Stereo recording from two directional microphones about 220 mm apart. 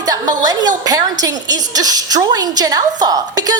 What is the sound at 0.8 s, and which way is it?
A woman's voice, 15° right (ahead or behind).